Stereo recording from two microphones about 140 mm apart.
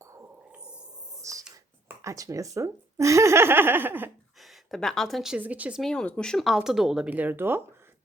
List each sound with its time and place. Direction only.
0.0 s dog: 20° right (ahead or behind)
0.5 s a sound: 5° right (ahead or behind)
1.2 s a sound: 25° right (ahead or behind)
1.9 s speech: 20° right (ahead or behind)
4.4 s speech: centre (ahead or behind)
5.8 s speech: 5° left (ahead or behind); by 7.6 s 15° right (ahead or behind)